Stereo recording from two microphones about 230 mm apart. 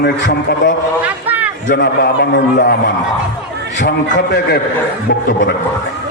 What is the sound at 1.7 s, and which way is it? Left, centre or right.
A man's voice, left.